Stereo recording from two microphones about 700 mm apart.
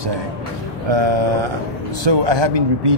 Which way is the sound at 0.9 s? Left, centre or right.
Right.